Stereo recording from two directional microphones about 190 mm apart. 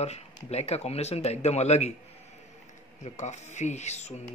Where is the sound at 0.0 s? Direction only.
35° left (ahead or behind).